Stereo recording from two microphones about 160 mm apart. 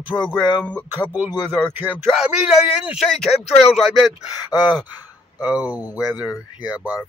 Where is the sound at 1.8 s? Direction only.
10° right (ahead or behind).